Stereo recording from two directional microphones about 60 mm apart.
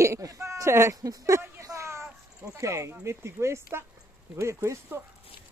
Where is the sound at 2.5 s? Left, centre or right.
Right.